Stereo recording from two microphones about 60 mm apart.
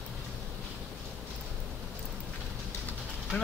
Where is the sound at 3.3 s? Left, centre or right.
Left.